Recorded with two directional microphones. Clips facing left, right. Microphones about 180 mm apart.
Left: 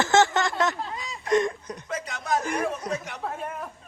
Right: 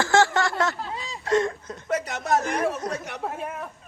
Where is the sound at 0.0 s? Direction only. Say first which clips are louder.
Even; 20° left (ahead or behind).